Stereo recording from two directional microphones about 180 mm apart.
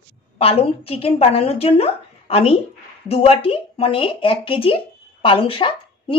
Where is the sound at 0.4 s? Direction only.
30° left (ahead or behind).